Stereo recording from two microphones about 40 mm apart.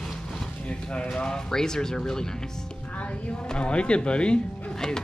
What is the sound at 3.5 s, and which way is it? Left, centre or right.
Speech, left.